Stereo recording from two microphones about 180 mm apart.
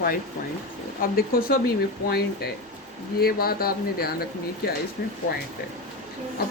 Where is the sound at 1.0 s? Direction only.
55° left (ahead or behind).